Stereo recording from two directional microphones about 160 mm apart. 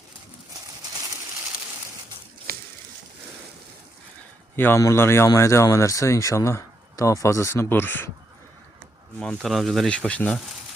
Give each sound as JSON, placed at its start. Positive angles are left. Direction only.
{"t": 2.5, "sound": "a sound", "side_deg": -70}
{"t": 4.5, "sound": "speech", "side_deg": 15}
{"t": 9.1, "sound": "speech", "side_deg": 5}